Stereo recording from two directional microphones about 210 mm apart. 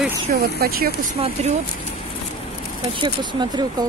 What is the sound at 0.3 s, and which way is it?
Speech, 45° right (ahead or behind).